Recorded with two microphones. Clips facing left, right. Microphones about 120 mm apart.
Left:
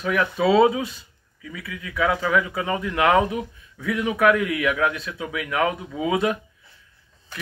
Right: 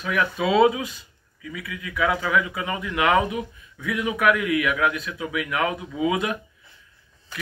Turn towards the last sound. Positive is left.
turn(degrees=30)  # may be behind; listen again after turning